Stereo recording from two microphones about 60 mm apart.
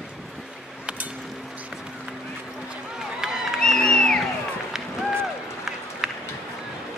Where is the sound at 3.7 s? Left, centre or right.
Centre.